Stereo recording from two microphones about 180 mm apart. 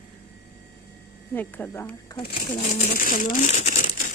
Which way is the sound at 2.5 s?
40° left (ahead or behind).